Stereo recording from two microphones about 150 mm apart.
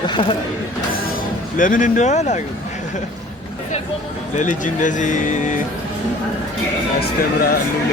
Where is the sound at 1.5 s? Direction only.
60° left (ahead or behind).